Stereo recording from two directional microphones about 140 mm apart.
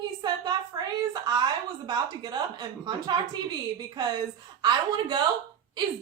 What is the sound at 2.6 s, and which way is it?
Speech, 30° right (ahead or behind).